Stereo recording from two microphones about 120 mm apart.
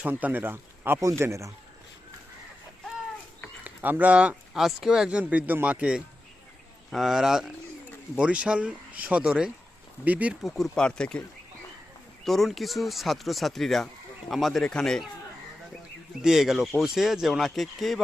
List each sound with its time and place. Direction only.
0.0 s speech: 15° right (ahead or behind)
3.6 s speech: 15° right (ahead or behind)
10.5 s speech: 5° left (ahead or behind)
12.2 s speech: centre (ahead or behind)
16.2 s speech: 5° right (ahead or behind)